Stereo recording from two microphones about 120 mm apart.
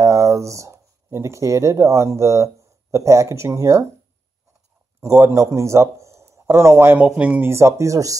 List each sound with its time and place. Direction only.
0.0 s speech: 25° right (ahead or behind)
5.0 s a man's voice: 25° right (ahead or behind)